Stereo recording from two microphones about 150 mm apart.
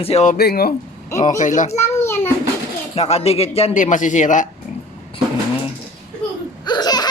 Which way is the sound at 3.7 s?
60° left (ahead or behind).